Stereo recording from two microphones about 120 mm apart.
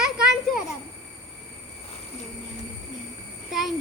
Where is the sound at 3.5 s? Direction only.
Centre (ahead or behind).